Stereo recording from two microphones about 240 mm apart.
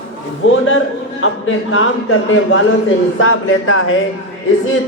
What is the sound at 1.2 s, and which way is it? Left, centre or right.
A man's voice, left.